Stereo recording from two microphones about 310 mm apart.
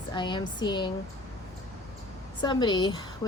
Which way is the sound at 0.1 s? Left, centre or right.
Centre.